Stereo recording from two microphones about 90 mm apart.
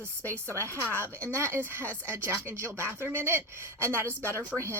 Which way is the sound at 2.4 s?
30° right (ahead or behind).